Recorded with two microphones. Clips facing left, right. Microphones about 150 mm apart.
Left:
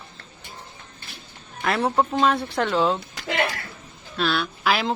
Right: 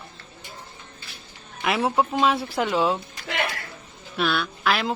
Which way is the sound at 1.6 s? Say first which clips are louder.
Left 1 dB; 5° right (ahead or behind).